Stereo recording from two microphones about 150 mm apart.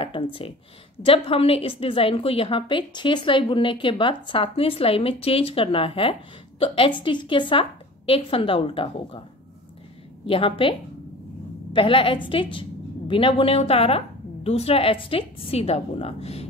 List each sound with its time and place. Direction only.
0.0 s a woman's voice: 35° left (ahead or behind)
10.2 s a woman's voice: 35° left (ahead or behind)